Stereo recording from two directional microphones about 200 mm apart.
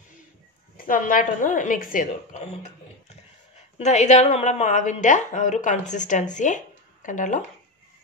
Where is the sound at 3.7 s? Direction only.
35° left (ahead or behind).